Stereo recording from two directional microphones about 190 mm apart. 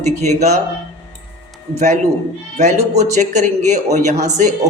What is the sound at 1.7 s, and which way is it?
A man's voice, 35° right (ahead or behind).